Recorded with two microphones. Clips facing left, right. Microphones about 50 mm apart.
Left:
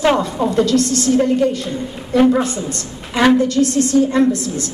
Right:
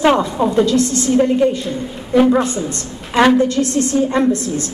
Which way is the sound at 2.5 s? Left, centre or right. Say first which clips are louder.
Right 2 dB; right.